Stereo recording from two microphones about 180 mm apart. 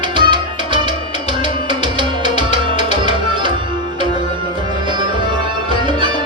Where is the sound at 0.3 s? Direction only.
25° right (ahead or behind).